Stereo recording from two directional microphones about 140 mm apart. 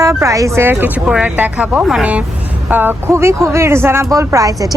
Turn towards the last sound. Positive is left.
turn(degrees=-25)  # may be behind; listen again after turning